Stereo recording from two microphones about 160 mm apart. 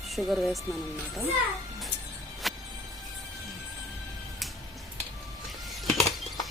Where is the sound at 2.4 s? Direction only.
Centre (ahead or behind).